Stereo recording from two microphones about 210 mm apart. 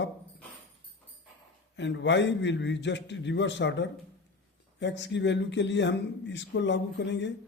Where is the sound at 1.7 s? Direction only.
55° left (ahead or behind).